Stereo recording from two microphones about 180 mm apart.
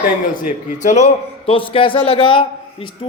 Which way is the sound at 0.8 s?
40° left (ahead or behind).